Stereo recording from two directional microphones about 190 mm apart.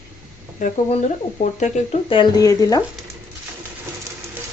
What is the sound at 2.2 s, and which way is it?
Speech, 20° left (ahead or behind).